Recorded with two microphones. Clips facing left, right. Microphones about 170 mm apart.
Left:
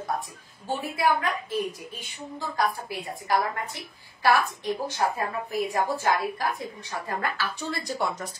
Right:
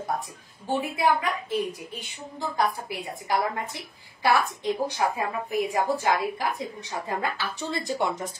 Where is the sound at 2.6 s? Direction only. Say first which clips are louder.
Even; 20° right (ahead or behind).